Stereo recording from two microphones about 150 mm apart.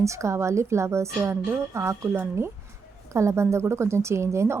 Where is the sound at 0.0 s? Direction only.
20° right (ahead or behind).